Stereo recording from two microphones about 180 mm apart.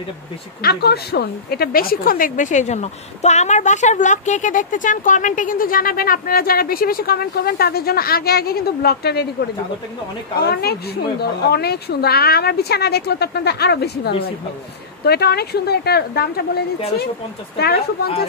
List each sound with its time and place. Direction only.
0.6 s a woman's voice: 65° left (ahead or behind)
10.4 s a woman's voice: 60° left (ahead or behind)